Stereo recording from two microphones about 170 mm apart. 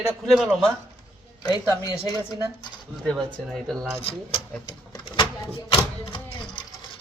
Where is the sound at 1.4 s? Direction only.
25° left (ahead or behind).